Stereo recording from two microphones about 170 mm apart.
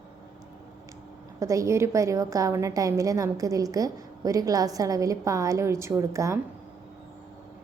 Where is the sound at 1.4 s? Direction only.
20° right (ahead or behind).